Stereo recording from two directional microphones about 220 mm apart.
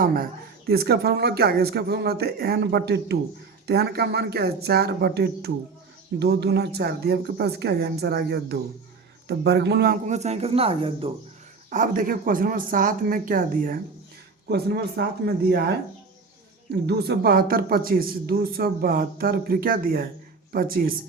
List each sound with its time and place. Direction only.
0.0 s speech: 40° right (ahead or behind); by 11.1 s 25° right (ahead or behind)
11.7 s speech: 35° right (ahead or behind)
16.8 s speech: 50° right (ahead or behind)